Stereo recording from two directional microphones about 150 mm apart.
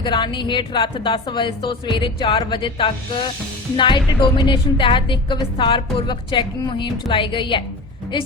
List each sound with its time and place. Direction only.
0.0 s a woman's voice: 30° left (ahead or behind)